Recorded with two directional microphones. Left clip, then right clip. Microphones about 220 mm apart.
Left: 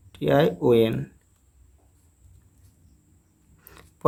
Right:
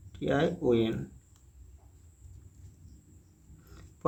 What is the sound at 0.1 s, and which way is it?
Speech, 40° left (ahead or behind).